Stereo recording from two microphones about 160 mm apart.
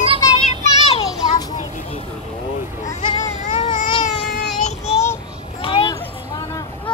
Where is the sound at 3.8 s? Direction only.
55° left (ahead or behind).